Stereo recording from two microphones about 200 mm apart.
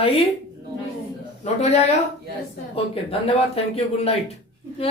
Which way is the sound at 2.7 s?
30° left (ahead or behind).